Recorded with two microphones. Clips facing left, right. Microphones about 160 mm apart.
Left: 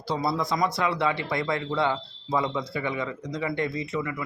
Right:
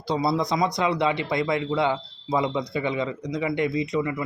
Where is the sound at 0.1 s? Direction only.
20° right (ahead or behind).